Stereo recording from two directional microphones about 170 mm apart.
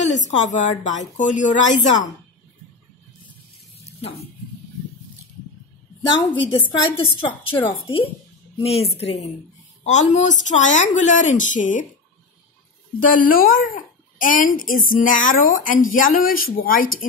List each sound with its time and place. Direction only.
0.0 s a child's voice: 45° left (ahead or behind)
3.8 s a sound: 35° left (ahead or behind)
6.2 s a woman's voice: 30° left (ahead or behind); by 11.8 s 50° left (ahead or behind)
13.0 s a child's voice: 55° left (ahead or behind)